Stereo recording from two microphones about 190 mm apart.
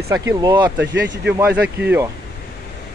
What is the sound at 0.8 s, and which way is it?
Speech, 70° right (ahead or behind).